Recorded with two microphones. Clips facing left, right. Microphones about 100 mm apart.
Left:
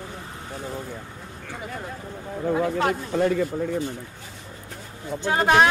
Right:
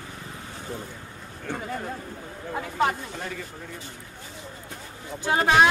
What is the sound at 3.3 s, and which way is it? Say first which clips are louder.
Speech: left 13 dB; 45° left (ahead or behind).